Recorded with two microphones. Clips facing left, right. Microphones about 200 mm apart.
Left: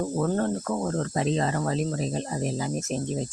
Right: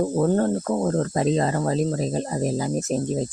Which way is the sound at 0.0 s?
35° right (ahead or behind).